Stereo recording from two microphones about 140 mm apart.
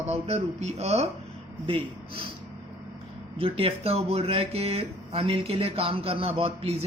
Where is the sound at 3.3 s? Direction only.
40° right (ahead or behind).